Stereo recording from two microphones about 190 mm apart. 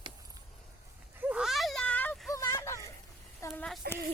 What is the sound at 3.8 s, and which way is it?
Speech, 55° right (ahead or behind).